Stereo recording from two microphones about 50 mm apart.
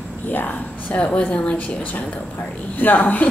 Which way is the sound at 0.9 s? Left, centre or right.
Left.